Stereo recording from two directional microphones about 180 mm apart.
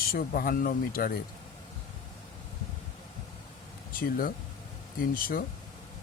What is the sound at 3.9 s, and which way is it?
Speech, 55° left (ahead or behind).